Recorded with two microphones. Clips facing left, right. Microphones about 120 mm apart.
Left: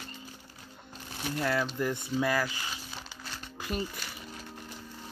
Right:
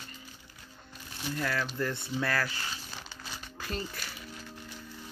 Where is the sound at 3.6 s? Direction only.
15° left (ahead or behind).